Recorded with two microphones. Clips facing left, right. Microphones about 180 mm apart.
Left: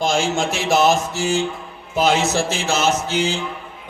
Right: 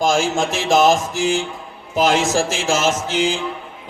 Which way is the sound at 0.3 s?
45° right (ahead or behind).